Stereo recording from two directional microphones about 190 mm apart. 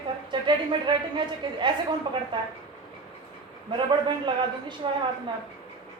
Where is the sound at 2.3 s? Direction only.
25° right (ahead or behind).